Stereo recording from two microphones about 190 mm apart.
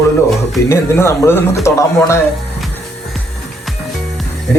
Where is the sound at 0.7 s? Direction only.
15° left (ahead or behind).